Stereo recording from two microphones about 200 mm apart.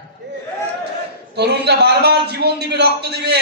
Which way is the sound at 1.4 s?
55° right (ahead or behind).